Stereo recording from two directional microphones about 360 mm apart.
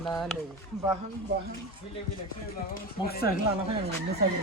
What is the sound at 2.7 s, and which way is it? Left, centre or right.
Speech, left.